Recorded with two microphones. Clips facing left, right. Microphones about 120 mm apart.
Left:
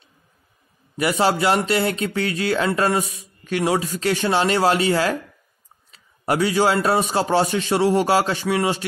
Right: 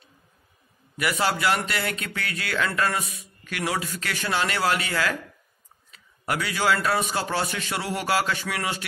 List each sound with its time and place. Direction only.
0.9 s speech: 30° left (ahead or behind)